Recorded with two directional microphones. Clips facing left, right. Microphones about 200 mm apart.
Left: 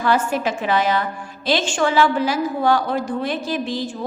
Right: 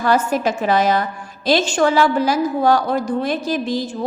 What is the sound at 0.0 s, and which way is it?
A woman's voice, 40° right (ahead or behind).